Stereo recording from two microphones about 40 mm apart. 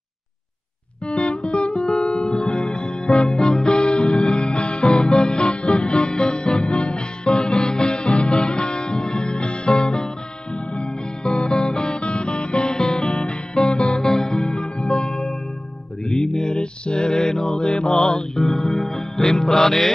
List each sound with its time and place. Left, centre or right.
1.0 s music: left
1.8 s music: centre
2.1 s music: left
16.1 s mantra: centre